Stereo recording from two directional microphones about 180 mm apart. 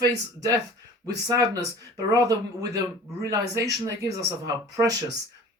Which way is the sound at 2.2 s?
20° right (ahead or behind).